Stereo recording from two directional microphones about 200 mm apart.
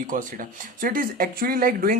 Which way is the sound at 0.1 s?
40° right (ahead or behind).